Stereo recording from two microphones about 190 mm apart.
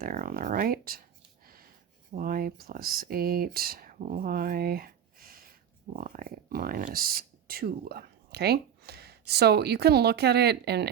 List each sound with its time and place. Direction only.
0.0 s speech: 50° right (ahead or behind)
1.5 s a sound: 50° right (ahead or behind)
2.1 s speech: 50° right (ahead or behind)